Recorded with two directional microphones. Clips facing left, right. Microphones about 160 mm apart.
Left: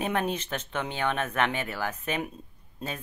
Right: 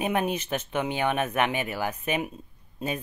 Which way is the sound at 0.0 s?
10° right (ahead or behind).